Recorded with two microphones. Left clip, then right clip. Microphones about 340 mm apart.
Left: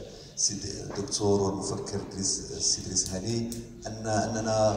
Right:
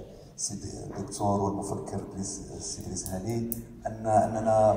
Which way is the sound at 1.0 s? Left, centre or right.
Right.